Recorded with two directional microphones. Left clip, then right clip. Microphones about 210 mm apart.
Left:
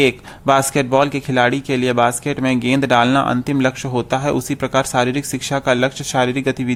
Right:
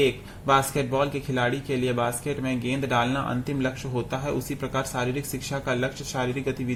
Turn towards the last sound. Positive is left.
turn(degrees=40)  # may be behind; listen again after turning